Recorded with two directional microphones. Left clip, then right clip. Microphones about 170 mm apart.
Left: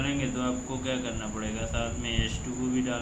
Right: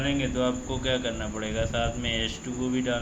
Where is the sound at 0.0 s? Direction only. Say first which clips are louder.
Right 4 dB; 35° right (ahead or behind).